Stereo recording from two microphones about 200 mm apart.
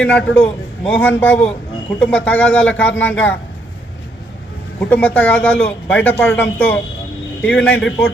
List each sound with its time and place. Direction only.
0.0 s speech: 5° left (ahead or behind)
4.8 s a man's voice: 5° left (ahead or behind)